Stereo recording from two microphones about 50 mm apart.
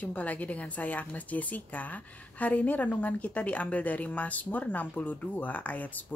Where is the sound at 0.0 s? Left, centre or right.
Left.